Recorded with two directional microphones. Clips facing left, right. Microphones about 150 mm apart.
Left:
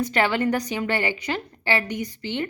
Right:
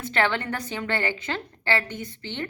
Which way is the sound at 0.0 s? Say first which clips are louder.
Left 4 dB; 10° left (ahead or behind).